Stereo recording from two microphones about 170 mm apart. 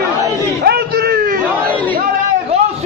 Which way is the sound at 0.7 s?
65° right (ahead or behind).